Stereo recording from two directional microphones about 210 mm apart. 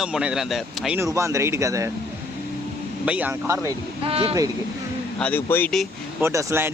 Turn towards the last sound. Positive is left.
turn(degrees=-10)  # may be behind; listen again after turning